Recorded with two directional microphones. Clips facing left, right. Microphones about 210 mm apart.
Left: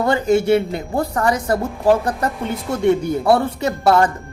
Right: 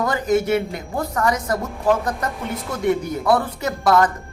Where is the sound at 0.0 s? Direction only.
30° left (ahead or behind).